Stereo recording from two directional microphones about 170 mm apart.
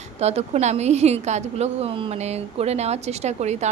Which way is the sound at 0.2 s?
40° right (ahead or behind).